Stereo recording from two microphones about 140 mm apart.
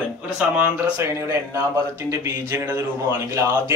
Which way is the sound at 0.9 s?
20° right (ahead or behind).